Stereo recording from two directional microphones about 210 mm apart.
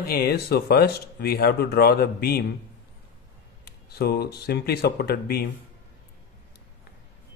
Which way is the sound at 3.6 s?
50° left (ahead or behind).